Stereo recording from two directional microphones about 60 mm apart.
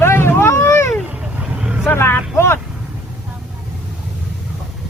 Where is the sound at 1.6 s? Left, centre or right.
Centre.